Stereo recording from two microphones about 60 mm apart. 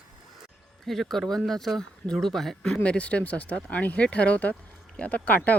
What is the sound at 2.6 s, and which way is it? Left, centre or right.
Speech, centre.